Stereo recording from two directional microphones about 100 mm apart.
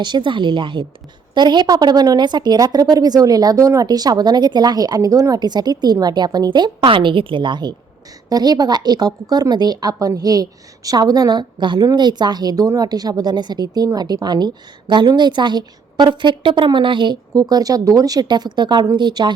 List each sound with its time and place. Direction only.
0.0 s speech: 50° right (ahead or behind)
17.3 s speech: 40° right (ahead or behind)